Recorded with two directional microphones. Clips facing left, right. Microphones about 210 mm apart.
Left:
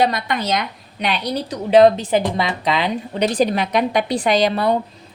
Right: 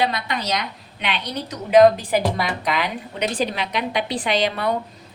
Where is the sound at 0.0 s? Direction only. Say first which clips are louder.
Left 4 dB; 50° left (ahead or behind).